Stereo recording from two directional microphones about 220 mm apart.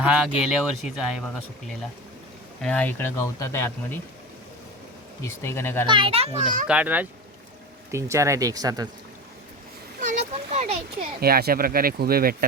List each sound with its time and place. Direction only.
0.0 s speech: 5° right (ahead or behind)
2.6 s speech: 5° left (ahead or behind)
5.2 s speech: 10° left (ahead or behind)
5.8 s a child's voice: 25° right (ahead or behind)
6.7 s speech: 5° right (ahead or behind)
10.0 s a sound: 30° right (ahead or behind)
11.2 s speech: 45° right (ahead or behind)